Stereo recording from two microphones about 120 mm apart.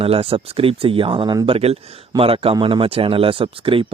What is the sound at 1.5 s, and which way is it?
Speech, 55° right (ahead or behind).